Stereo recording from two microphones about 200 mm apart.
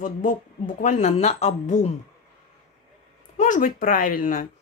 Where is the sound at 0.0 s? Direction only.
40° left (ahead or behind).